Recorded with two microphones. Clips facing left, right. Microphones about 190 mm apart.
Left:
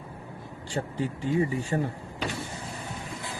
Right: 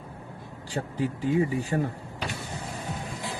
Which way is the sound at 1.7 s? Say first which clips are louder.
Right 1 dB; 5° left (ahead or behind).